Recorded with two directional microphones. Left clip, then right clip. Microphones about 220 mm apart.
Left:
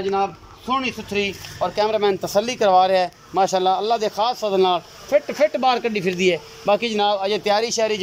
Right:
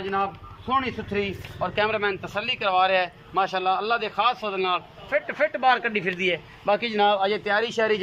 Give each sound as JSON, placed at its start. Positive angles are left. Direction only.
{"t": 0.1, "sound": "speech", "side_deg": 15}